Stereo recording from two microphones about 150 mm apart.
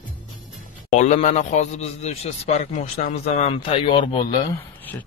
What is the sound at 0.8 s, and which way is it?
A man's voice, 50° left (ahead or behind).